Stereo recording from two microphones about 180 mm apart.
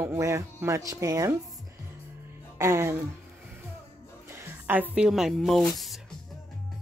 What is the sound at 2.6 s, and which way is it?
Speech, 15° right (ahead or behind).